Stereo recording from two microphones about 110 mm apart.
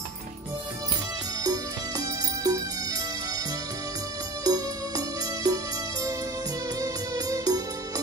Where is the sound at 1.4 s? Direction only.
35° right (ahead or behind).